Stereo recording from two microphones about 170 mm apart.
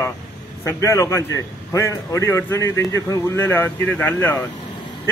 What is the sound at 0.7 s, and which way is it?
A man's voice, 15° left (ahead or behind).